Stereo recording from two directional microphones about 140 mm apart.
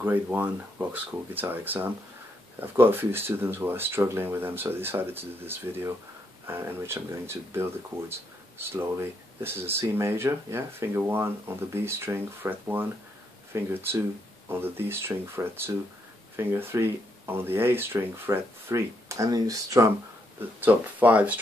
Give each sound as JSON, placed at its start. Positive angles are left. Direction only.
{"t": 0.0, "sound": "speech", "side_deg": -15}
{"t": 20.3, "sound": "speech", "side_deg": -10}